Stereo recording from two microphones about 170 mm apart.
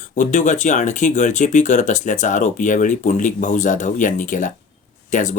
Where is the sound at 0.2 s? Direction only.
45° left (ahead or behind).